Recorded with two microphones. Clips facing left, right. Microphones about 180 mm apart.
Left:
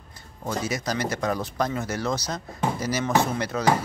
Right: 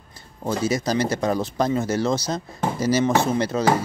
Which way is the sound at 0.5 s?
30° right (ahead or behind).